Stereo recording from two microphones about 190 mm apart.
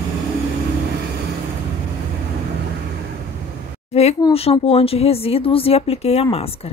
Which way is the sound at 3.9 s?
35° left (ahead or behind).